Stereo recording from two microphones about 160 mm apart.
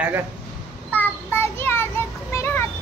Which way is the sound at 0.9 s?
10° left (ahead or behind).